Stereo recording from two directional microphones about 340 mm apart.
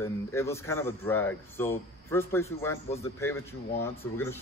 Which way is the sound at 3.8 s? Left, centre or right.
Centre.